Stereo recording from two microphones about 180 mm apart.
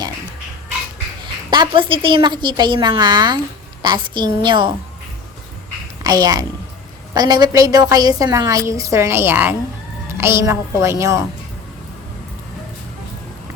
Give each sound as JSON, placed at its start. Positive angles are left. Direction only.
{"t": 1.5, "sound": "a woman's voice", "side_deg": -25}
{"t": 6.0, "sound": "a child's voice", "side_deg": -20}